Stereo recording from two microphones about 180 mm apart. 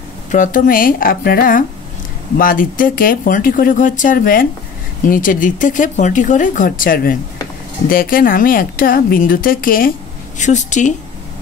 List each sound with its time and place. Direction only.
0.3 s a woman's voice: 45° left (ahead or behind)